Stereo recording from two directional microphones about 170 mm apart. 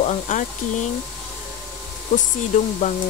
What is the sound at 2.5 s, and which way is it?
Speech, 50° left (ahead or behind).